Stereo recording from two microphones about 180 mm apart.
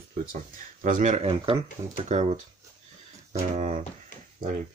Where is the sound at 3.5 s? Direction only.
40° right (ahead or behind).